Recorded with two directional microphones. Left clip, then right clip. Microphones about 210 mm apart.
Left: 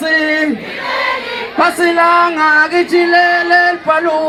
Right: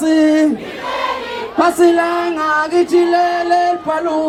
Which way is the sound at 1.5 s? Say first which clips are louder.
Even; 10° left (ahead or behind).